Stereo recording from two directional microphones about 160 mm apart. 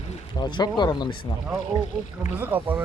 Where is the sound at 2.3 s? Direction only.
10° right (ahead or behind).